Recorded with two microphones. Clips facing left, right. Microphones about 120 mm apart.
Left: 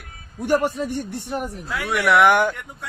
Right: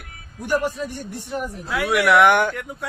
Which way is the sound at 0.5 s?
70° left (ahead or behind).